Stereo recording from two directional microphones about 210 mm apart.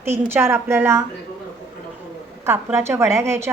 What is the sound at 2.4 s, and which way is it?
A woman's voice, 10° right (ahead or behind).